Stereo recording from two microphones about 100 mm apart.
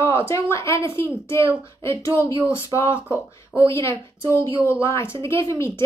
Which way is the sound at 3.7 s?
30° left (ahead or behind).